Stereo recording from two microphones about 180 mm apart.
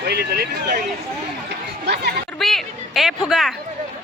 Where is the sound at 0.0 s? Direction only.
60° right (ahead or behind).